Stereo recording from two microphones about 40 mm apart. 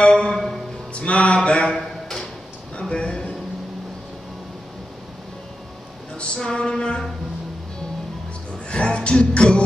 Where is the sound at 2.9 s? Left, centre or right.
Left.